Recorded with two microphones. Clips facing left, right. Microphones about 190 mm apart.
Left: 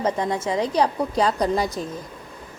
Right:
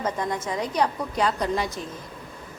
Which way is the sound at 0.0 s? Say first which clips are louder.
Left 4 dB; 30° left (ahead or behind).